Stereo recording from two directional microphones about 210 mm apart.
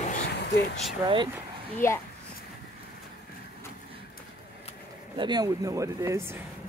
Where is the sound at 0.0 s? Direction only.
35° left (ahead or behind).